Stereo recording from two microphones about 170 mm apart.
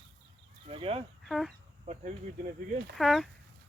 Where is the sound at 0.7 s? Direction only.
35° right (ahead or behind).